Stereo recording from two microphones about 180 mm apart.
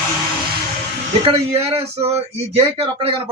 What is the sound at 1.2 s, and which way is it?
Speech, 35° right (ahead or behind).